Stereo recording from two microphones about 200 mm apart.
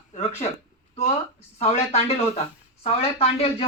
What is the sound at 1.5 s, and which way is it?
A woman's voice, 35° left (ahead or behind).